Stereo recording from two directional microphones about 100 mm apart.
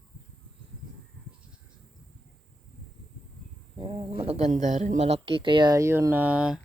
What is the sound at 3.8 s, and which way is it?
Speech, 60° right (ahead or behind).